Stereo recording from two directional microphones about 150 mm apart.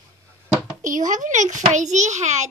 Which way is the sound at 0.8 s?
60° right (ahead or behind).